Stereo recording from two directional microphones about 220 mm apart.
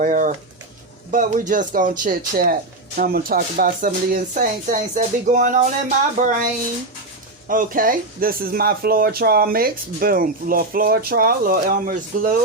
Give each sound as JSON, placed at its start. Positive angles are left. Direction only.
{"t": 0.0, "sound": "speech", "side_deg": -35}